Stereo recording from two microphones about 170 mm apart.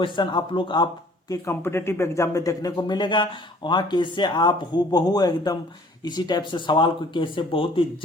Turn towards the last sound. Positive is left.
turn(degrees=30)  # may be behind; listen again after turning